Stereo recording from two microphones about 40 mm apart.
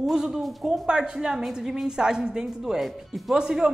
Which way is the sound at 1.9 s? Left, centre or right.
Centre.